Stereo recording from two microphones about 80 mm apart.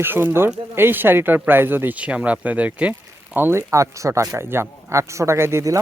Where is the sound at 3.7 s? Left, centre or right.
Right.